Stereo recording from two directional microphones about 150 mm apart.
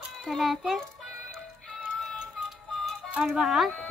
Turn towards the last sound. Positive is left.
turn(degrees=0)  # may be behind; listen again after turning